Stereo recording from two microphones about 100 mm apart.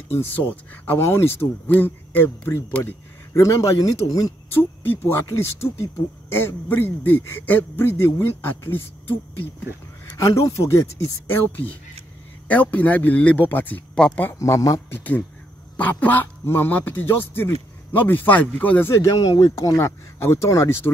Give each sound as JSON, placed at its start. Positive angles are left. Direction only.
{"t": 0.1, "sound": "speech", "side_deg": 20}
{"t": 4.8, "sound": "speech", "side_deg": 20}
{"t": 10.1, "sound": "a man's voice", "side_deg": 35}
{"t": 11.3, "sound": "a man's voice", "side_deg": 20}
{"t": 14.4, "sound": "a man's voice", "side_deg": 35}
{"t": 14.9, "sound": "a man's voice", "side_deg": 20}